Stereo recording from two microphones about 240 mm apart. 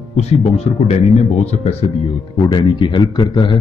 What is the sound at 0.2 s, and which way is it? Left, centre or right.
Speech, left.